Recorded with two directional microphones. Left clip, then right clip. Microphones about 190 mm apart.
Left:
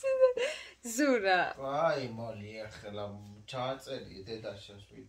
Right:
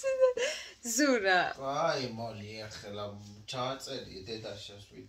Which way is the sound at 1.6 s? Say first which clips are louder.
Left 1 dB; 55° left (ahead or behind).